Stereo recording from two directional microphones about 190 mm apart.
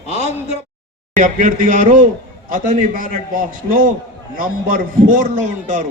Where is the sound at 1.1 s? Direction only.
45° right (ahead or behind).